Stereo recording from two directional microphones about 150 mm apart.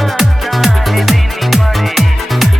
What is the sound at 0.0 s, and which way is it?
Music, centre (ahead or behind).